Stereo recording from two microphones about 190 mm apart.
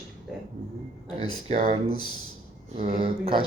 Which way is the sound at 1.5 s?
35° right (ahead or behind).